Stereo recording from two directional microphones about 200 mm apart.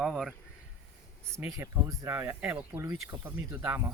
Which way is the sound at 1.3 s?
15° right (ahead or behind).